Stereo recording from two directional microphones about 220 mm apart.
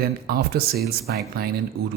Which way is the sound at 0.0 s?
45° right (ahead or behind).